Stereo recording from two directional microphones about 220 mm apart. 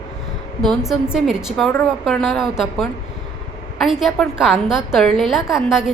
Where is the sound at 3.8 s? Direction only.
Centre (ahead or behind).